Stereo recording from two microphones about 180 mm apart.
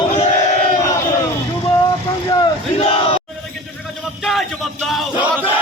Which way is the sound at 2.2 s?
20° left (ahead or behind).